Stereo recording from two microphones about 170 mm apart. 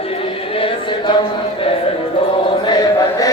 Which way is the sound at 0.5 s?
30° left (ahead or behind).